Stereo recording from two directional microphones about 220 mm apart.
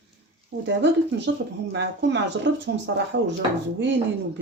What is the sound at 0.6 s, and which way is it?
Speech, 55° right (ahead or behind).